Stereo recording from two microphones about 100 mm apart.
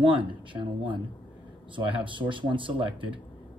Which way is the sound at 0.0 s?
55° right (ahead or behind).